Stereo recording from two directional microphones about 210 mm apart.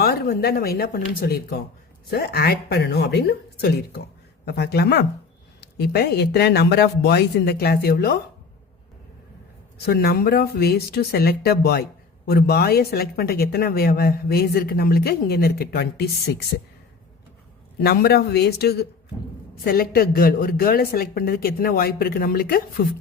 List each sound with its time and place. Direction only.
0.0 s speech: 45° left (ahead or behind)
9.7 s speech: 50° left (ahead or behind)
17.8 s speech: 50° left (ahead or behind)